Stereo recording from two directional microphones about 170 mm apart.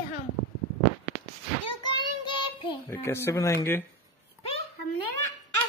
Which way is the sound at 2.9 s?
15° left (ahead or behind).